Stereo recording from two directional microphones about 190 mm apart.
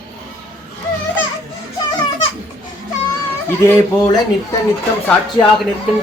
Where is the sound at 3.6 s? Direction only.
15° left (ahead or behind).